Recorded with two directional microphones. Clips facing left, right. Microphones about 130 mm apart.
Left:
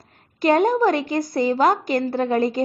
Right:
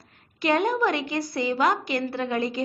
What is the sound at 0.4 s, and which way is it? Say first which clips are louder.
A woman's voice: left 5 dB; 40° left (ahead or behind).